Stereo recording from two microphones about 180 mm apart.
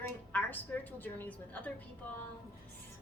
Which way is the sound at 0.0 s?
10° left (ahead or behind).